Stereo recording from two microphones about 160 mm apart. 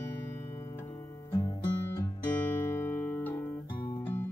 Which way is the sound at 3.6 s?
30° left (ahead or behind).